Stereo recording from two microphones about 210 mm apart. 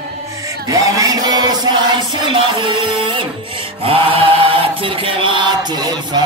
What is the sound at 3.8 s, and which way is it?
Mantra, 25° right (ahead or behind).